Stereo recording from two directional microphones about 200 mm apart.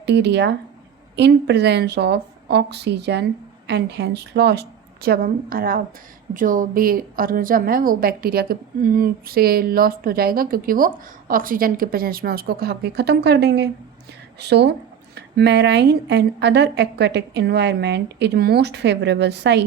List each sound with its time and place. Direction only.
0.0 s a woman's voice: 60° right (ahead or behind)